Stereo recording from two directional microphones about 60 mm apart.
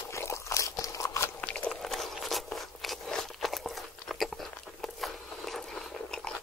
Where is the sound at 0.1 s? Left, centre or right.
Left.